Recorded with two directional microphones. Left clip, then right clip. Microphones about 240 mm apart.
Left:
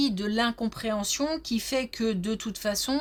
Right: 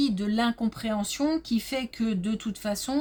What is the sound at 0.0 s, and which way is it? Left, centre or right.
Speech, left.